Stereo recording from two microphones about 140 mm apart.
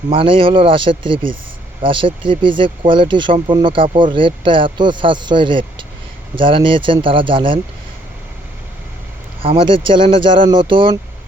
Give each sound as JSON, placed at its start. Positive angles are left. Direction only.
{"t": 0.1, "sound": "speech", "side_deg": -40}
{"t": 9.4, "sound": "speech", "side_deg": -40}